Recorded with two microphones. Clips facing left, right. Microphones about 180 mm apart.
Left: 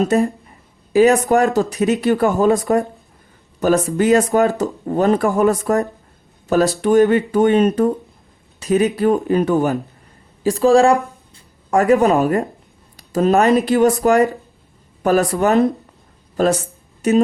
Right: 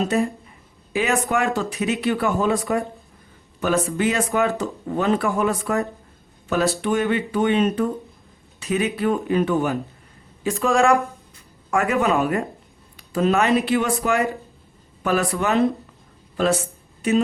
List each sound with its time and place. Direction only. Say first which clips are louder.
0.9 s speech: left 9 dB; 40° left (ahead or behind)
3.8 s speech: left 7 dB; 40° left (ahead or behind)
17.0 s speech: left 5 dB; 40° left (ahead or behind)